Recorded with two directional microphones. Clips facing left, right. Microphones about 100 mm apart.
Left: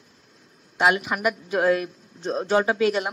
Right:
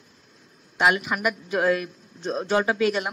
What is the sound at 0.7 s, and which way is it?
Speech, 30° left (ahead or behind).